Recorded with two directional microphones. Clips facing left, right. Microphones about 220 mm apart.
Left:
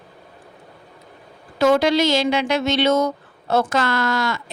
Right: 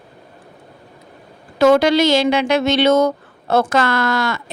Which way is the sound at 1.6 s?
75° right (ahead or behind).